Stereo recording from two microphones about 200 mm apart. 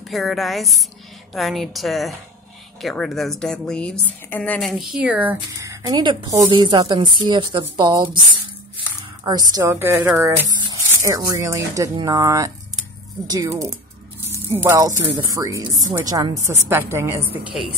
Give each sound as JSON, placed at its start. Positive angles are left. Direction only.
{"t": 0.1, "sound": "a woman's voice", "side_deg": 0}